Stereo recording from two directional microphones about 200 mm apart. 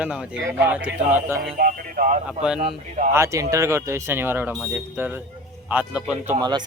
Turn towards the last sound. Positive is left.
turn(degrees=-20)  # may be behind; listen again after turning